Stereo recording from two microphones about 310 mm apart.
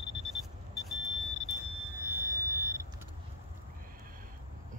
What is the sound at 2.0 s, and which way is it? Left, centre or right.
Vehicle, centre.